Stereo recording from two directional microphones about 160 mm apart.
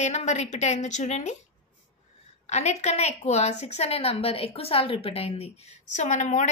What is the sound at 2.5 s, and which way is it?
A woman's voice, 45° left (ahead or behind).